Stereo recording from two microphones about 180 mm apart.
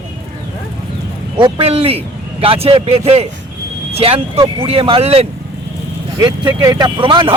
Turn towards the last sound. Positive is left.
turn(degrees=-30)  # may be behind; listen again after turning